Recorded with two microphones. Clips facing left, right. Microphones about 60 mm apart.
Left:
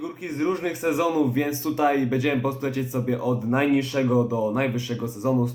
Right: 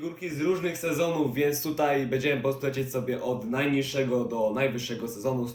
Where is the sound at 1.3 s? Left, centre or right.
Left.